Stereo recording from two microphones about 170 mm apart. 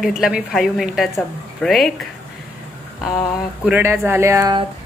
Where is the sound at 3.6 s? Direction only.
15° right (ahead or behind).